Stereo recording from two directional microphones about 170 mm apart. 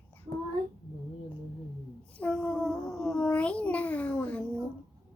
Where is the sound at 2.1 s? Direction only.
5° left (ahead or behind).